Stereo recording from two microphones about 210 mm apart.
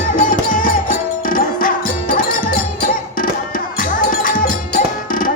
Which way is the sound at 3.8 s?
40° left (ahead or behind).